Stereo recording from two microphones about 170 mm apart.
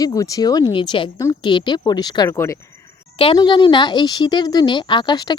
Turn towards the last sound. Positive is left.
turn(degrees=25)  # may be behind; listen again after turning